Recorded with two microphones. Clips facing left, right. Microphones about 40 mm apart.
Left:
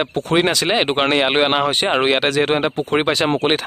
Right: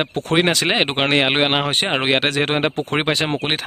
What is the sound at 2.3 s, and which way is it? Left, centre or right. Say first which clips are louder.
Speech: left 2 dB; right.